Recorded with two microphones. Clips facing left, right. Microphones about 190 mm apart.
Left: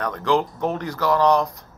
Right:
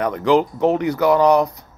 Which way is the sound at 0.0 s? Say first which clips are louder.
Right 5 dB; 15° right (ahead or behind).